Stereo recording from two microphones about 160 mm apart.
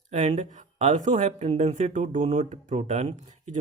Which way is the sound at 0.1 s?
45° right (ahead or behind).